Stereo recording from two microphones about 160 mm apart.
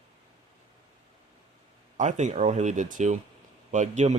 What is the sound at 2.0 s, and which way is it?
Speech, 50° right (ahead or behind).